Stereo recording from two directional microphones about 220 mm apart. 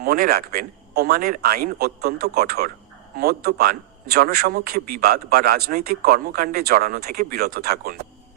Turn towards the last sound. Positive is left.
turn(degrees=-45)  # may be behind; listen again after turning